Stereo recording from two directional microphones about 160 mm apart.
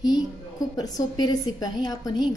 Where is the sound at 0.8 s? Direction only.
25° left (ahead or behind).